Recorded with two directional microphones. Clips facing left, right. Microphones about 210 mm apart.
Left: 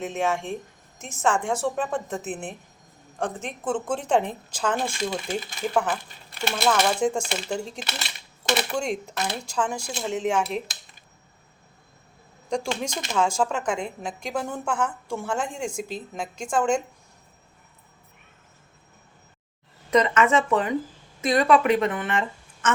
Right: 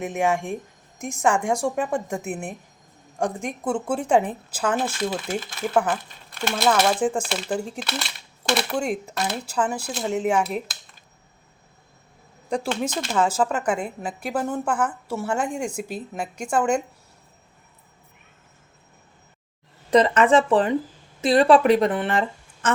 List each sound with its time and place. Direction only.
0.0 s speech: 15° right (ahead or behind)
12.5 s speech: 5° right (ahead or behind)
19.9 s speech: 30° right (ahead or behind)
22.6 s a sound: 35° right (ahead or behind)